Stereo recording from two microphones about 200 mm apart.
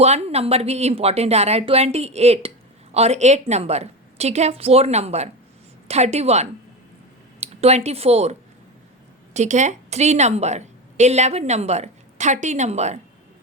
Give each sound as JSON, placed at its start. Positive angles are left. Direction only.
{"t": 0.0, "sound": "a woman's voice", "side_deg": -30}